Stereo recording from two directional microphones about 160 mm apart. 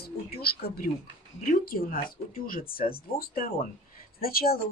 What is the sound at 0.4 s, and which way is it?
Speech, 80° left.